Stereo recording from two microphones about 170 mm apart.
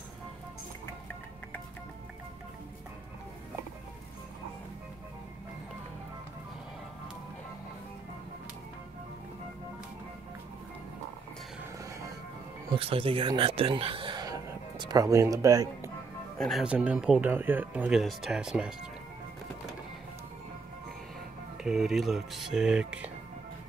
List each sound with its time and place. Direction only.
12.7 s speech: 35° right (ahead or behind)
16.3 s speech: centre (ahead or behind)
21.6 s speech: centre (ahead or behind)